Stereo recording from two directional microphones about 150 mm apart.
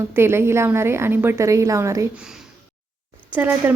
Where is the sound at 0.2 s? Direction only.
15° right (ahead or behind).